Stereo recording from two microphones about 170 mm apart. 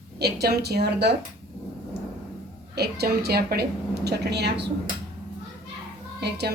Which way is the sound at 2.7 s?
70° right (ahead or behind).